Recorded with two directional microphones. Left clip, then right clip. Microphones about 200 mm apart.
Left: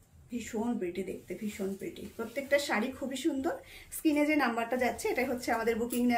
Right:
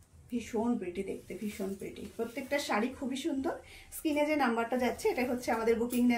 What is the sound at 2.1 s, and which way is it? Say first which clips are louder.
Speech: left 4 dB; 20° left (ahead or behind).